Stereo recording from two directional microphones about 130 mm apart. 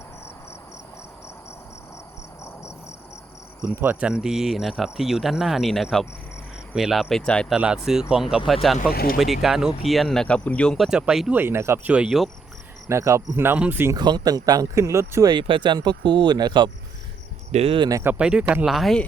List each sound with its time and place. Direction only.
3.7 s speech: 10° right (ahead or behind); by 7.4 s 5° left (ahead or behind)
7.5 s speech: 5° right (ahead or behind)
11.3 s speech: 20° right (ahead or behind)
12.9 s speech: 20° right (ahead or behind)
13.9 s speech: 30° right (ahead or behind)
17.5 s speech: 50° right (ahead or behind)
17.7 s speech: 30° right (ahead or behind)
18.0 s speech: 10° right (ahead or behind)